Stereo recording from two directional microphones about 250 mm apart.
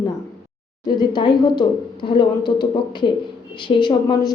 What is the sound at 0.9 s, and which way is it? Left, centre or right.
Speech, centre.